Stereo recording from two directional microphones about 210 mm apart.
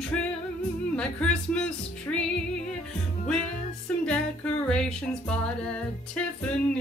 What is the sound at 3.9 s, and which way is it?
Music, 5° left (ahead or behind).